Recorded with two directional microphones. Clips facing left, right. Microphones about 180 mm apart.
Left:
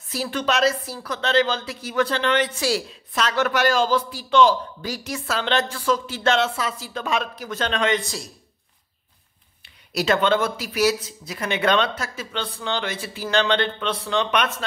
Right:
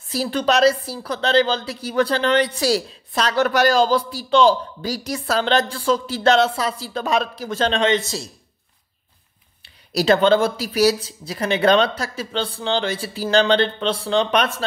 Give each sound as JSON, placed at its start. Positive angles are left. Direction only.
{"t": 0.1, "sound": "a woman's voice", "side_deg": -35}
{"t": 9.6, "sound": "a woman's voice", "side_deg": -35}